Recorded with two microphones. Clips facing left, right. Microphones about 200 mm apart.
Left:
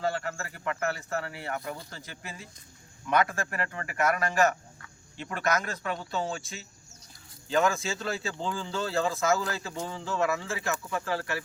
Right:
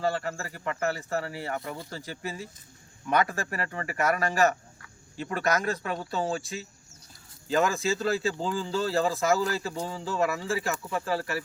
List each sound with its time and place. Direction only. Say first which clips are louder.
0.0 s speech: right 2 dB; 35° right (ahead or behind)